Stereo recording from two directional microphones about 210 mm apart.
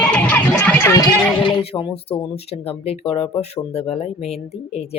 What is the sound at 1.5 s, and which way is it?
Speech, 25° left (ahead or behind).